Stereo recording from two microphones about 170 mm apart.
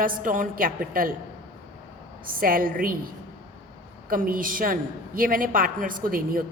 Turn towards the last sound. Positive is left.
turn(degrees=-55)  # may be behind; listen again after turning